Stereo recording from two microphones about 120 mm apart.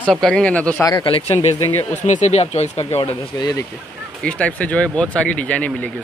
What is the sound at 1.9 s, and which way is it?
Speech, 85° left.